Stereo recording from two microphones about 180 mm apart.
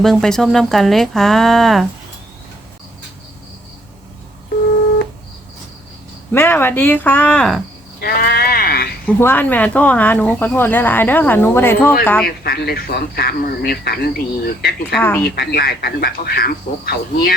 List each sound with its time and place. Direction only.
0.0 s speech: centre (ahead or behind)
6.3 s speech: 10° left (ahead or behind)
8.0 s sheep: 55° left (ahead or behind)
9.0 s speech: 10° left (ahead or behind)
12.2 s speech: 60° left (ahead or behind)